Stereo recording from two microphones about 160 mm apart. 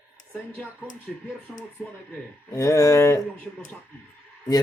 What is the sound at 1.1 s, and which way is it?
Speech, centre (ahead or behind).